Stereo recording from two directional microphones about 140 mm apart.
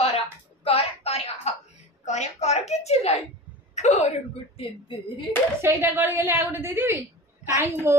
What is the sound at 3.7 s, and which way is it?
Whimper, 55° left (ahead or behind).